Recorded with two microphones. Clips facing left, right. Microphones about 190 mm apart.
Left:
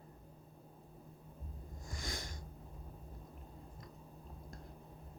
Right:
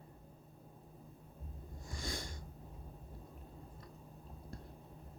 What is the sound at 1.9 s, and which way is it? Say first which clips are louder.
Sniff: right 2 dB; 30° right (ahead or behind).